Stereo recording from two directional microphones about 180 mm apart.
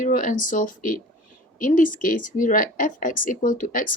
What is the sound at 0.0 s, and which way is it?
Speech, 45° left (ahead or behind).